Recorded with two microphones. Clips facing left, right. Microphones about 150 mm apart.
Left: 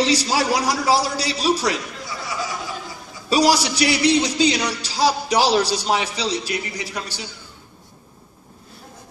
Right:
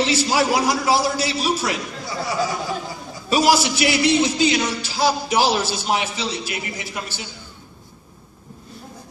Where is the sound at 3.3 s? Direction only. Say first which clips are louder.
Even; 35° left (ahead or behind).